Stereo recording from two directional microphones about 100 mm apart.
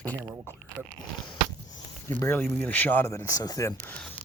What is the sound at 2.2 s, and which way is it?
Speech, 25° left (ahead or behind).